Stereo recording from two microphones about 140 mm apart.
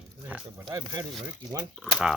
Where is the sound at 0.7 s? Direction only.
25° right (ahead or behind).